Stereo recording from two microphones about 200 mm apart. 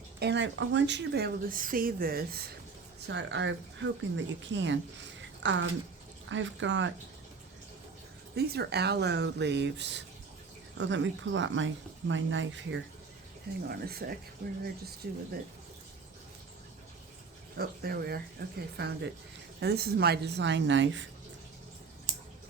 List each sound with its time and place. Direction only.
0.2 s speech: 60° right (ahead or behind)
3.1 s speech: 60° right (ahead or behind)
8.4 s speech: 55° right (ahead or behind)
13.7 s speech: 50° right (ahead or behind)
17.6 s speech: 50° right (ahead or behind); by 21.1 s 65° right (ahead or behind)